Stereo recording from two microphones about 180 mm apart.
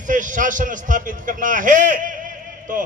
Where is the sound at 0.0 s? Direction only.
45° right (ahead or behind).